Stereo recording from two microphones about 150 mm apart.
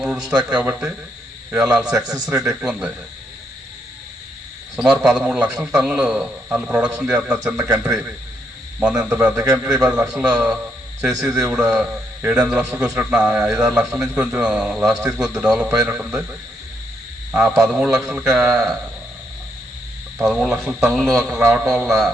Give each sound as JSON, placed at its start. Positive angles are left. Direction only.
{"t": 0.0, "sound": "a man's voice", "side_deg": -5}
{"t": 4.8, "sound": "a man's voice", "side_deg": -5}
{"t": 8.8, "sound": "a man's voice", "side_deg": -5}
{"t": 11.3, "sound": "a man's voice", "side_deg": -20}
{"t": 11.5, "sound": "a man's voice", "side_deg": -5}
{"t": 17.6, "sound": "a man's voice", "side_deg": -5}
{"t": 20.1, "sound": "a man's voice", "side_deg": 0}